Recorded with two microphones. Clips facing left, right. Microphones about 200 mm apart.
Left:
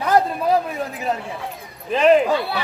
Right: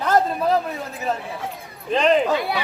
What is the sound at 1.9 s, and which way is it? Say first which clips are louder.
Speech: left 3 dB; 5° left (ahead or behind).